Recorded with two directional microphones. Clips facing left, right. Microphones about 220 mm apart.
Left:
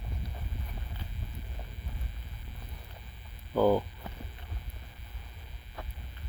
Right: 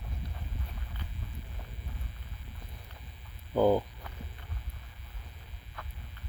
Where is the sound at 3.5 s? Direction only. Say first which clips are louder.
Even; 15° right (ahead or behind).